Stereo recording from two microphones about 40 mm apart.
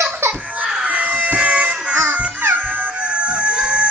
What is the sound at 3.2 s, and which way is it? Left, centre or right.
Fowl, right.